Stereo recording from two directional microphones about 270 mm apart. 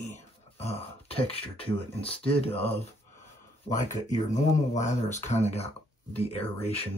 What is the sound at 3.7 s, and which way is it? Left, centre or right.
Speech, left.